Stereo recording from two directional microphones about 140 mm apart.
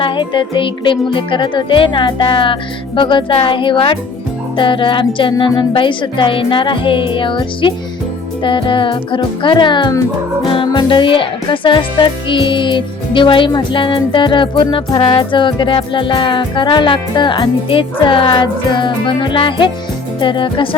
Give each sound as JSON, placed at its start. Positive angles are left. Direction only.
{"t": 0.0, "sound": "speech", "side_deg": 35}